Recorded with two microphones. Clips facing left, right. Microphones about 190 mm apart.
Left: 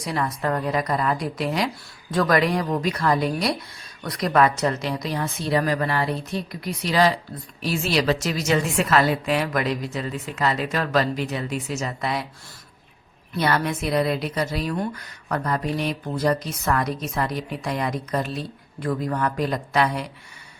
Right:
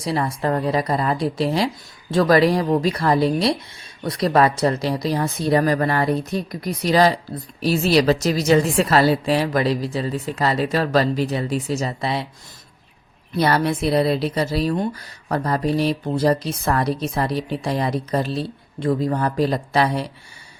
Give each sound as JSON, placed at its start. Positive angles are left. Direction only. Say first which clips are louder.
{"t": 0.0, "sound": "a woman's voice", "louder": "right 3 dB", "side_deg": -30}
{"t": 13.3, "sound": "a woman's voice", "louder": "right 4 dB", "side_deg": -35}